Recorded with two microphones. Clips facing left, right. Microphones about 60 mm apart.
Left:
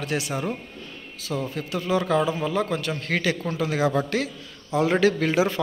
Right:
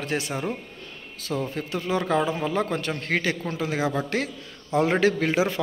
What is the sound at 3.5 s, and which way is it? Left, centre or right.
Speech, right.